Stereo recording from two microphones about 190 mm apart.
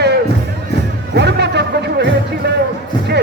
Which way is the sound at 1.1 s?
60° right (ahead or behind).